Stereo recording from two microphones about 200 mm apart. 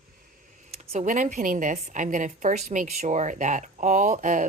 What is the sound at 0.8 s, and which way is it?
A woman's voice, 35° right (ahead or behind).